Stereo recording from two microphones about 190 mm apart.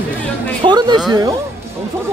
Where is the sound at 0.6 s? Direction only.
25° right (ahead or behind).